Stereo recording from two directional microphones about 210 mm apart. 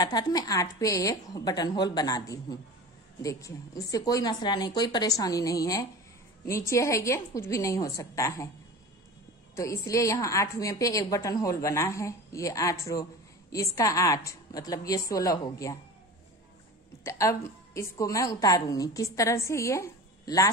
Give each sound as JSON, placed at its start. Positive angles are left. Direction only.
{"t": 0.0, "sound": "a woman's voice", "side_deg": 20}
{"t": 9.6, "sound": "a woman's voice", "side_deg": 15}
{"t": 17.0, "sound": "a woman's voice", "side_deg": 15}